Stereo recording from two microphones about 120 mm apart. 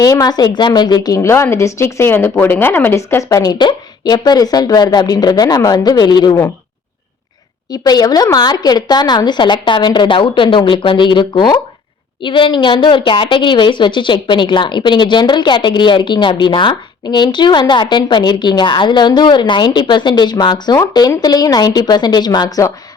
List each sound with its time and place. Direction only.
0.0 s a woman's voice: 30° left (ahead or behind)
7.7 s a woman's voice: 35° left (ahead or behind)